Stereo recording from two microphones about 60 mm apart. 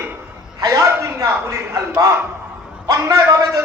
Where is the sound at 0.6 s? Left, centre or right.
Right.